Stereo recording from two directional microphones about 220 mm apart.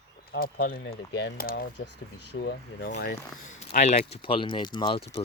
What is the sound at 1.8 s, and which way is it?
Speech, 90° left.